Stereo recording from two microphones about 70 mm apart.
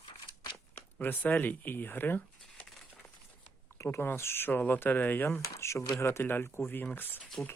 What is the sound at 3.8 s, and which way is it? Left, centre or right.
Speech, left.